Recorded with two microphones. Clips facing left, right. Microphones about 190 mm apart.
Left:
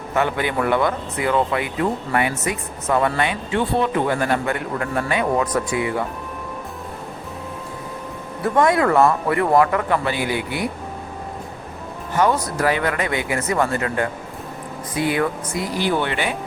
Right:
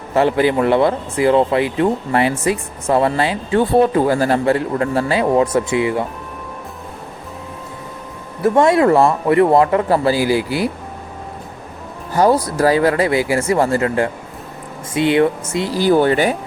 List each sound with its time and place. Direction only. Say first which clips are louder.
0.1 s speech: right 7 dB; 30° right (ahead or behind)
8.4 s speech: right 5 dB; 25° right (ahead or behind)
12.1 s speech: right 5 dB; 35° right (ahead or behind)